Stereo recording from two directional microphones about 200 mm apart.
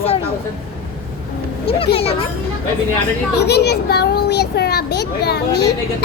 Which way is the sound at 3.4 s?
55° left (ahead or behind).